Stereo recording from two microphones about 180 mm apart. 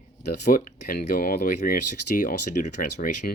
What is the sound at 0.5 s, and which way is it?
Speech, 55° left (ahead or behind).